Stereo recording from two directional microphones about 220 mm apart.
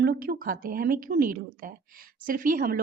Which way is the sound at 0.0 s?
40° right (ahead or behind).